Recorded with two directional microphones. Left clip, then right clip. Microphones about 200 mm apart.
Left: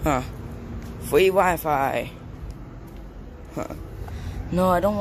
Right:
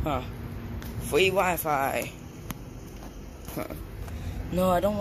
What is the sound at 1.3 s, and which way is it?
Speech, 30° left (ahead or behind).